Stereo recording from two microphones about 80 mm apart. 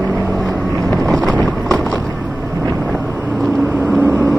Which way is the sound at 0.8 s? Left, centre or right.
Centre.